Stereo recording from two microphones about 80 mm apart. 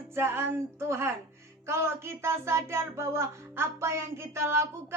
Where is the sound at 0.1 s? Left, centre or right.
Right.